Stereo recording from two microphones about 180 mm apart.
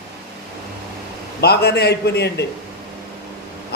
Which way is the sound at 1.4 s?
65° left (ahead or behind).